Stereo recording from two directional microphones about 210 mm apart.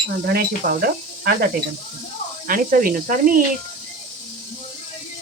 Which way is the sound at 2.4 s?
40° right (ahead or behind).